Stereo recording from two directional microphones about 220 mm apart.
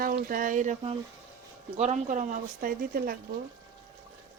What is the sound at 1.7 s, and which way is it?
Speech, 30° right (ahead or behind).